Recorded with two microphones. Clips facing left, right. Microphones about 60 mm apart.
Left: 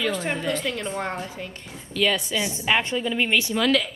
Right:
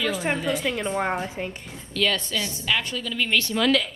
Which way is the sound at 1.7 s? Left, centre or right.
Centre.